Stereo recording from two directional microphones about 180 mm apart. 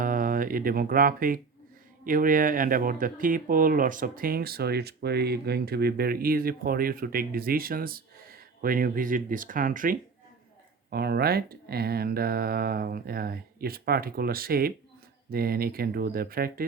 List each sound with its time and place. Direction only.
0.0 s speech: 50° right (ahead or behind)
10.8 s speech: 60° right (ahead or behind)